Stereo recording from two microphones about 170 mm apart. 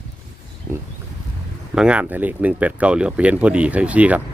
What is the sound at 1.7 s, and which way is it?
Speech, 5° right (ahead or behind).